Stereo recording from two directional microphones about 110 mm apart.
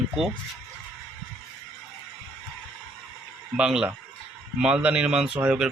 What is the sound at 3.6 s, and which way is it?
Speech, 10° right (ahead or behind).